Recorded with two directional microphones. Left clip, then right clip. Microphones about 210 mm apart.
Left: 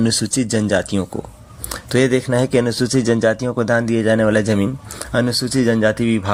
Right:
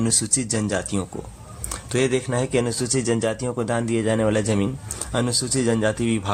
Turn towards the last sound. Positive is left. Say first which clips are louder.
# left 6 dB
turn(degrees=20)  # may be behind; listen again after turning